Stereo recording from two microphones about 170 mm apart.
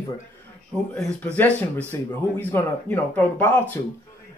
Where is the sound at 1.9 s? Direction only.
15° left (ahead or behind).